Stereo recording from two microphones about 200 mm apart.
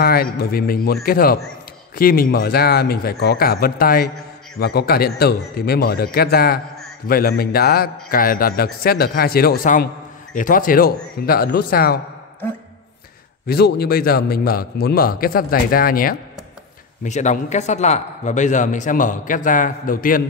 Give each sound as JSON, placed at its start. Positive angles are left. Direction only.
{"t": 0.0, "sound": "a man's voice", "side_deg": 50}
{"t": 13.5, "sound": "a man's voice", "side_deg": 50}